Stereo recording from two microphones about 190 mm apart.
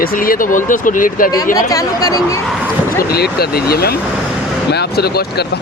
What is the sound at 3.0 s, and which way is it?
Speech, 55° left (ahead or behind).